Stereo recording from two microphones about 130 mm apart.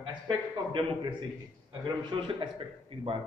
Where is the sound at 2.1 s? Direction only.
40° right (ahead or behind).